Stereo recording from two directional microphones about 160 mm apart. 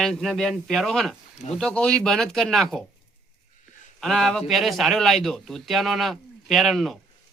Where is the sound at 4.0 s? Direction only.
Centre (ahead or behind).